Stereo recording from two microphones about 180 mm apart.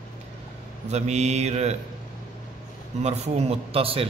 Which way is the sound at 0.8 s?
40° right (ahead or behind).